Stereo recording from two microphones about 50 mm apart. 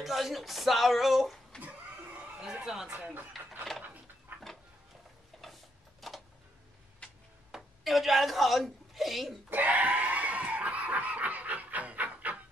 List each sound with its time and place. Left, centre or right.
0.0 s speech: centre
1.6 s a sound: right
2.6 s speech: centre
2.9 s speech: right
5.4 s tick-tock: centre
7.5 s a woman's voice: centre
9.5 s screaming: right